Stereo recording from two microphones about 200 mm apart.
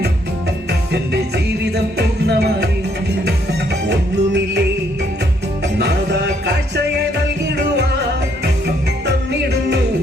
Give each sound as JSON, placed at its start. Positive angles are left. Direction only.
{"t": 1.6, "sound": "music", "side_deg": -55}
{"t": 3.8, "sound": "music", "side_deg": -55}